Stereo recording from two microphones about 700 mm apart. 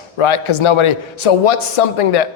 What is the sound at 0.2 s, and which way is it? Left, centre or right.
A man's voice, left.